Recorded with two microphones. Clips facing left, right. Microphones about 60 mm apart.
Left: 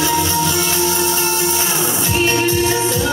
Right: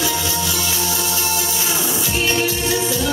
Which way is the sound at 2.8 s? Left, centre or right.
Centre.